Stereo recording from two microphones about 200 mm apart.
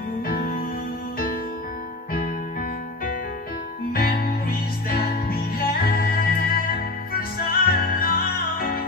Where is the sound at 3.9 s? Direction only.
50° left (ahead or behind).